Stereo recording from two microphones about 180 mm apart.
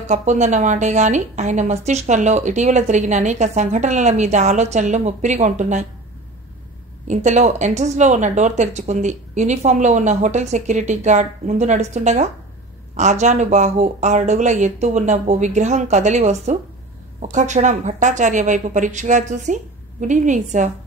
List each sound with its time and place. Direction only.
0.0 s a woman's voice: 40° right (ahead or behind)
7.1 s a woman's voice: 40° right (ahead or behind)